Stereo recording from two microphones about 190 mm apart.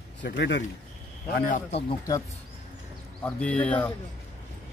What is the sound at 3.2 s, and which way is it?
Speech, 5° left (ahead or behind).